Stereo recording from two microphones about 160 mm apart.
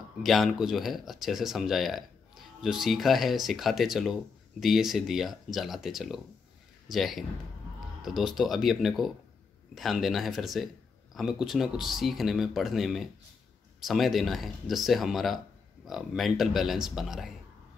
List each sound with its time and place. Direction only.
0.2 s speech: centre (ahead or behind)